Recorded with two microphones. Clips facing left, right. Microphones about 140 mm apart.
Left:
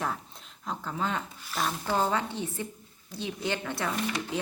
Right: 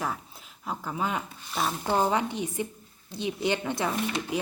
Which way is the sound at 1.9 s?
15° right (ahead or behind).